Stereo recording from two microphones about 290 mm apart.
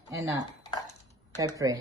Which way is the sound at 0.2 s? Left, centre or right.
Centre.